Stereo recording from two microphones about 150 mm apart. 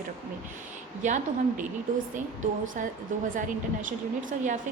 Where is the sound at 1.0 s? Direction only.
55° right (ahead or behind).